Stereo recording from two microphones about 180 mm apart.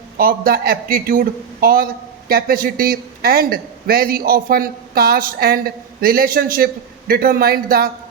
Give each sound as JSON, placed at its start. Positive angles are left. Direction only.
{"t": 0.2, "sound": "a man's voice", "side_deg": -55}